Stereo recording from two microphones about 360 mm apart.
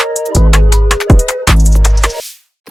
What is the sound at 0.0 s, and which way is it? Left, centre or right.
Music, centre.